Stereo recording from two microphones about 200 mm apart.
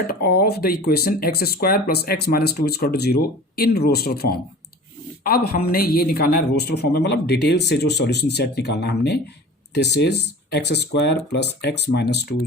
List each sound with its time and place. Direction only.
0.1 s a man's voice: 50° left (ahead or behind)